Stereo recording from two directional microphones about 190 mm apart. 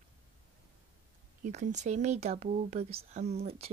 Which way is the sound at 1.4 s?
40° right (ahead or behind).